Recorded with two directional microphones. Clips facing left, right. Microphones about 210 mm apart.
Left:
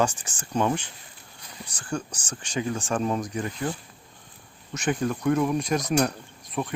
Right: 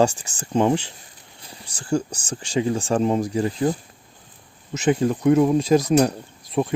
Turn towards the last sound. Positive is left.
turn(degrees=-30)  # may be behind; listen again after turning